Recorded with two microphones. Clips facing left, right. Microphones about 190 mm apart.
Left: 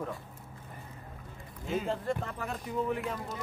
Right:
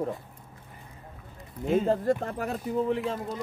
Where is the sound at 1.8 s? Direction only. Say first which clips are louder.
Right 8 dB; 40° right (ahead or behind).